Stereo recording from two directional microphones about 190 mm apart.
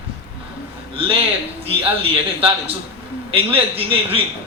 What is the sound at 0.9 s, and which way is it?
Speech, 30° right (ahead or behind).